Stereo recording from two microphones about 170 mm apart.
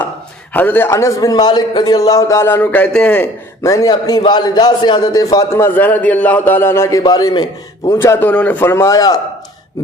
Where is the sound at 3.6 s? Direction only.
20° left (ahead or behind).